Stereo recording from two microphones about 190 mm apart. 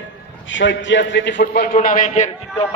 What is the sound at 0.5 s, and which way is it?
A man's voice, 70° left (ahead or behind).